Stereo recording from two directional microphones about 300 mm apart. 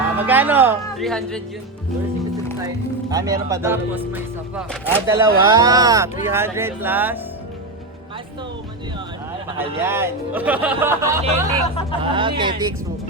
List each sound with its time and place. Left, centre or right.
0.0 s music: centre
0.9 s speech: centre
3.1 s speech: centre
9.8 s speech: centre
11.6 s speech: centre
12.1 s speech: centre